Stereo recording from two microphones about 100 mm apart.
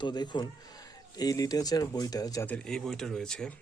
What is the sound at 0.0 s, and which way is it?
A man's voice, 45° left (ahead or behind).